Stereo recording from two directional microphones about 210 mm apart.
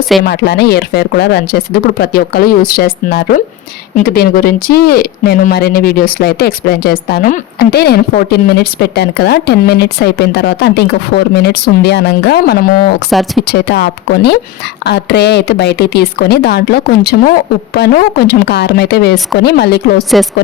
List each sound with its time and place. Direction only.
0.2 s speech: 50° left (ahead or behind)
13.1 s speech: centre (ahead or behind)
13.4 s speech: 50° left (ahead or behind)
20.1 s speech: centre (ahead or behind)